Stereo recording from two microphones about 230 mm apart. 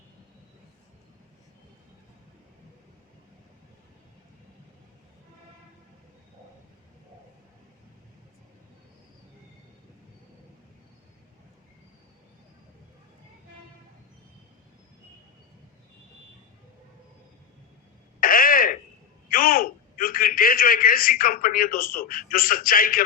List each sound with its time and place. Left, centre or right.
18.2 s throat clearing: left
19.3 s a man's voice: left